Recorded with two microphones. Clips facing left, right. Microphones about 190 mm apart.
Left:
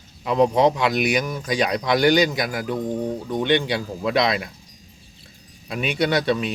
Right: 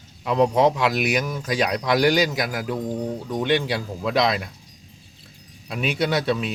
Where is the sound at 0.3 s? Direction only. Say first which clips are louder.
Left 1 dB; centre (ahead or behind).